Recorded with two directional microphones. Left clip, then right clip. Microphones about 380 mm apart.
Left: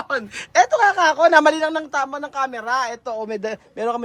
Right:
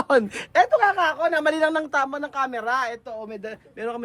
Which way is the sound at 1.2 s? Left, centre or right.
Centre.